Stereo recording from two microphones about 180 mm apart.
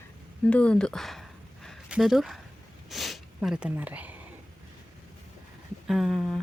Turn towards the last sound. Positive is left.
turn(degrees=0)  # may be behind; listen again after turning